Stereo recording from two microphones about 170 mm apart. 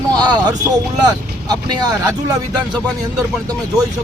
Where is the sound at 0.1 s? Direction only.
25° right (ahead or behind).